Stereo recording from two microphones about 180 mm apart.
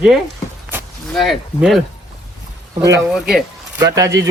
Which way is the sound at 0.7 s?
10° right (ahead or behind).